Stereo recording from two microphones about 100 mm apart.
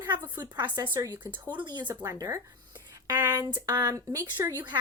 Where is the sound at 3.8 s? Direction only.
35° right (ahead or behind).